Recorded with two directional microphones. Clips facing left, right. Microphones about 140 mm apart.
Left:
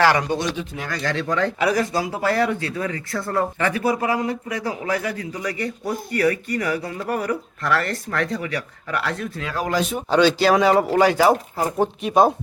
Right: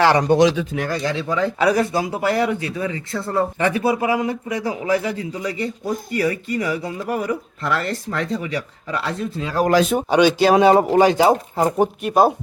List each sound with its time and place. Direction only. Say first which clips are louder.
0.0 s speech: right 2 dB; 25° right (ahead or behind)
0.3 s speech: right 9 dB; 75° right (ahead or behind)
1.0 s speech: left 2 dB; 10° right (ahead or behind)
1.6 s speech: right 5 dB; 30° right (ahead or behind)
12.0 s speech: even; 5° right (ahead or behind)